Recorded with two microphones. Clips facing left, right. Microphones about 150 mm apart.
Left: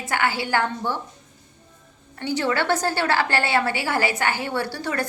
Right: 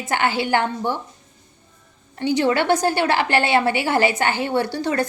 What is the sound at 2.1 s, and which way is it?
A woman's voice, 20° right (ahead or behind).